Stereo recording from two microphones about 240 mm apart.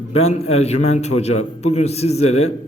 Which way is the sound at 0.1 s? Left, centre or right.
Left.